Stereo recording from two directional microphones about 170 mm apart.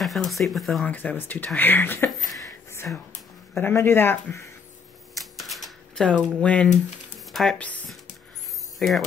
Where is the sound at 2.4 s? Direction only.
15° left (ahead or behind).